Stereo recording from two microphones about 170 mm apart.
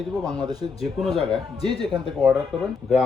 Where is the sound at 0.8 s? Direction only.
Centre (ahead or behind).